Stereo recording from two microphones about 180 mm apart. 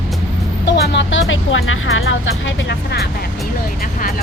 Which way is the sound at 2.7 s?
65° left (ahead or behind).